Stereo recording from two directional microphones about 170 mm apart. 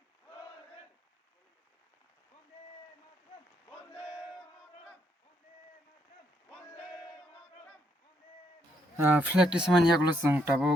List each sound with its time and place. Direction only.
3.9 s battle cry: 35° left (ahead or behind)
4.2 s battle cry: centre (ahead or behind)
9.0 s speech: 10° right (ahead or behind)